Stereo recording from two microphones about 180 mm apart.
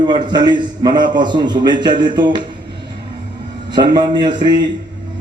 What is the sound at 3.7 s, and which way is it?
A man's voice, 25° right (ahead or behind).